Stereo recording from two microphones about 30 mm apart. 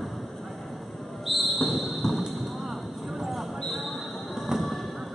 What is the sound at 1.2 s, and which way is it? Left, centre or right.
Basketball bounce, centre.